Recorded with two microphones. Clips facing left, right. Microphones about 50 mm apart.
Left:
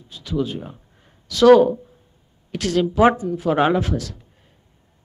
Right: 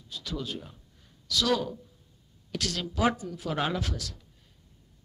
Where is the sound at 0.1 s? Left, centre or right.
Left.